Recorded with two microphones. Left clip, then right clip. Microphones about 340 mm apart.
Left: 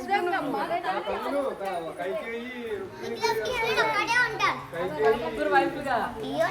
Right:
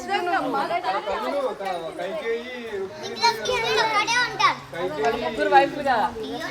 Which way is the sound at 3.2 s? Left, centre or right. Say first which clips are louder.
Right 5 dB; right.